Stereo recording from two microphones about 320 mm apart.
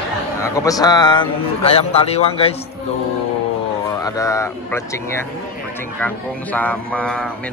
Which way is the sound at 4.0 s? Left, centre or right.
Centre.